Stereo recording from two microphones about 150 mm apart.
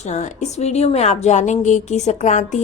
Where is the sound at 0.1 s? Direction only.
50° left (ahead or behind).